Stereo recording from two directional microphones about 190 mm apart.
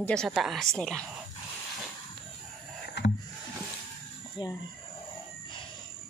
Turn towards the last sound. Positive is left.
turn(degrees=20)  # may be behind; listen again after turning